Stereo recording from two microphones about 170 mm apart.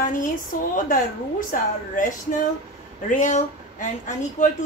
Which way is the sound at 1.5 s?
50° left (ahead or behind).